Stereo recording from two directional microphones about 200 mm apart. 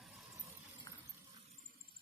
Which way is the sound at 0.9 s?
25° left (ahead or behind).